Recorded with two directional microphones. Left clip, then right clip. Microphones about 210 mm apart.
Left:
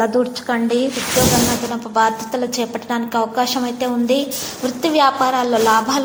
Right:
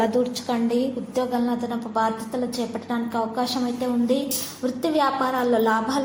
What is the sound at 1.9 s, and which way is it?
A woman's voice, 15° left (ahead or behind).